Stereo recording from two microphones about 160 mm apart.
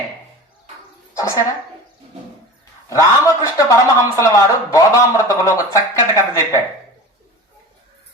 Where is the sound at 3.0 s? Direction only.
20° left (ahead or behind).